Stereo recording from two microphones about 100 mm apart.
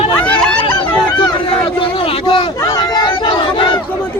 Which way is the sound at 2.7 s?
45° left (ahead or behind).